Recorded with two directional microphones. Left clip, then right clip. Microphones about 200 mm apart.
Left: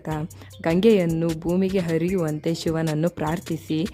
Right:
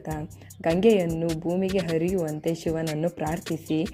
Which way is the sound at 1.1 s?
Centre (ahead or behind).